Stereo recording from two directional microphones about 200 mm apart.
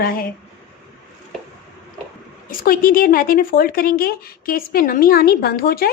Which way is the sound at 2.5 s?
45° left (ahead or behind).